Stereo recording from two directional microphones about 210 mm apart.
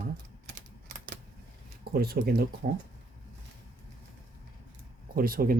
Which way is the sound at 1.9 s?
45° right (ahead or behind).